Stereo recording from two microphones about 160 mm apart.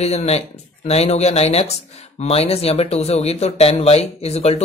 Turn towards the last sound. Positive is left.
turn(degrees=40)  # may be behind; listen again after turning